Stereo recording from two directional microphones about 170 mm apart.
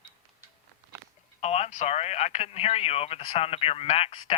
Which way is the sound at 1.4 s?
40° left (ahead or behind).